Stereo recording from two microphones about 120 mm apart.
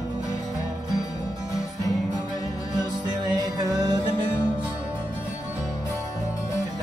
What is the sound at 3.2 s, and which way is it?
Music, 35° right (ahead or behind).